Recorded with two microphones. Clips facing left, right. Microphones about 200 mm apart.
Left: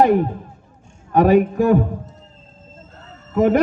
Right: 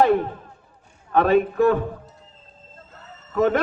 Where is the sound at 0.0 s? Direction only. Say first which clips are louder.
Left 3 dB; 15° left (ahead or behind).